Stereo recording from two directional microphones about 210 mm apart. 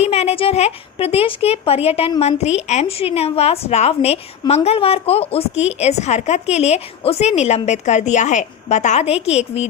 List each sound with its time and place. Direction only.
0.0 s a woman's voice: 30° left (ahead or behind)